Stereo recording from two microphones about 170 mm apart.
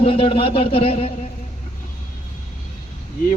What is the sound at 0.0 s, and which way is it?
A man's voice, 30° left (ahead or behind).